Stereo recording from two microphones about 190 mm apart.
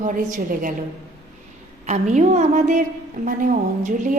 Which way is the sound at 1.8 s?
40° right (ahead or behind).